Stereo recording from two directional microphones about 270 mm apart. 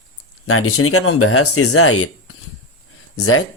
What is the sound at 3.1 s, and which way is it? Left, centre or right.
Speech, left.